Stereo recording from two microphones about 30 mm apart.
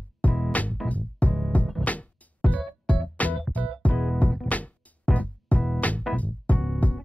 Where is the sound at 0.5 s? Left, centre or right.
Left.